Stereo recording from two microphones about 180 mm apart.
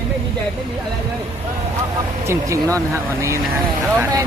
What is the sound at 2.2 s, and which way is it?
Speech, 15° right (ahead or behind).